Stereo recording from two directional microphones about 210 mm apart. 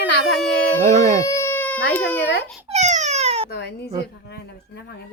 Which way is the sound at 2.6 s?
30° right (ahead or behind).